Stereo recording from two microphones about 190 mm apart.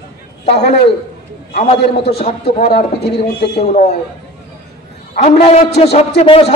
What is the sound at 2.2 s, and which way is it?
Speech, 35° left (ahead or behind).